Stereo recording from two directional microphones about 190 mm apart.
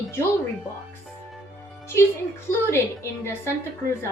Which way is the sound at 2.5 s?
15° left (ahead or behind).